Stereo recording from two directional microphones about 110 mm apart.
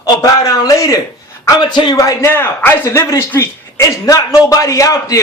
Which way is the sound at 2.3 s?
20° left (ahead or behind).